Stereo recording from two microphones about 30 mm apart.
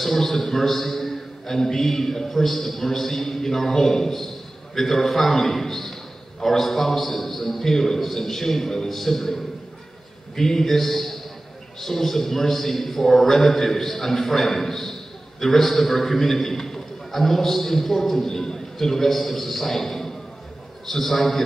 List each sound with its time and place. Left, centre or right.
0.0 s a man's voice: centre